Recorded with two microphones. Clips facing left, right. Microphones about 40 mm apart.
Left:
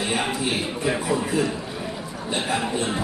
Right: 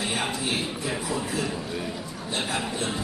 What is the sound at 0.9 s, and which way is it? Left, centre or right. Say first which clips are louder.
Speech: left 9 dB; left.